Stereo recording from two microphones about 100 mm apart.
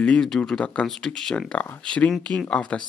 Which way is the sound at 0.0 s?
10° left (ahead or behind).